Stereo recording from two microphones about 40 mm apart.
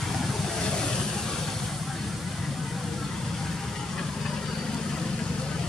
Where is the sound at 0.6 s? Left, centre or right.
Centre.